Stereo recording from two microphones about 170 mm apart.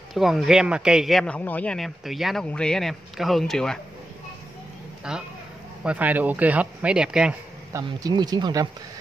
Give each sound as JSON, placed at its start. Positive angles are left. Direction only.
{"t": 0.1, "sound": "a man's voice", "side_deg": 0}
{"t": 5.1, "sound": "a man's voice", "side_deg": -5}
{"t": 7.7, "sound": "speech", "side_deg": -25}